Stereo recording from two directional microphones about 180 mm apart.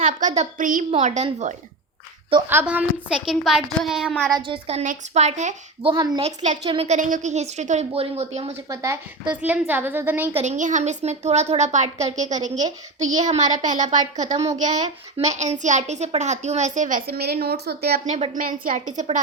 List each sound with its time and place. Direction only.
0.0 s speech: 45° right (ahead or behind)
0.9 s a woman's voice: 35° right (ahead or behind)
2.5 s a woman's voice: 10° right (ahead or behind)
4.3 s a woman's voice: 25° right (ahead or behind)
8.7 s speech: 20° right (ahead or behind)
9.3 s a woman's voice: 10° right (ahead or behind)
10.3 s a woman's voice: 45° right (ahead or behind); by 18.0 s 60° right (ahead or behind)
18.0 s a woman's voice: 40° right (ahead or behind)